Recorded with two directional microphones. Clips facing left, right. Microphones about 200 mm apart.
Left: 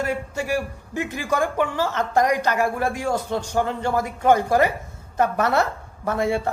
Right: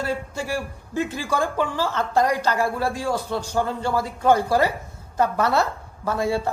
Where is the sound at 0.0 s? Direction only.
15° left (ahead or behind).